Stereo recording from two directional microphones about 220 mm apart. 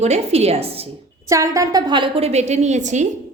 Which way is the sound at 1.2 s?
15° right (ahead or behind).